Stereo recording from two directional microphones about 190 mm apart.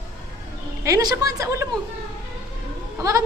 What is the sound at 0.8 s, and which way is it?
Speech, 20° right (ahead or behind).